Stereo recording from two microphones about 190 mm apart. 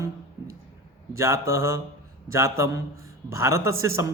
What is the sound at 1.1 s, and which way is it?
A man's voice, 15° right (ahead or behind).